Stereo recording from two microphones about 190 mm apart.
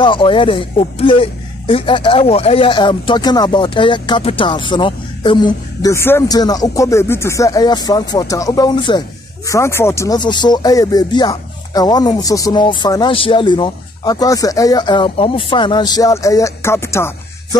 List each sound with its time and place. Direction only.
0.0 s speech: 25° left (ahead or behind)